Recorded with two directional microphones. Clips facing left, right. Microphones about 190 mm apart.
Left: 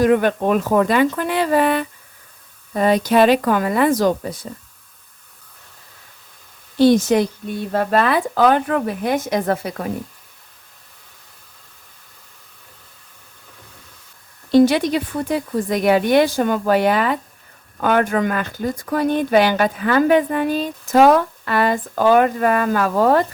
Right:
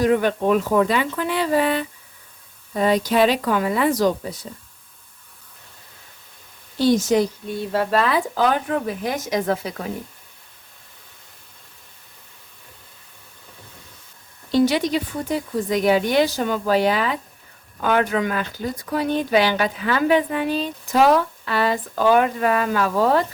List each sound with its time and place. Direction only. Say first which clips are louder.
0.0 s a woman's voice: left 3 dB; 55° left (ahead or behind)
6.7 s speech: left 4 dB; 55° left (ahead or behind)
14.5 s a woman's voice: left 5 dB; 50° left (ahead or behind)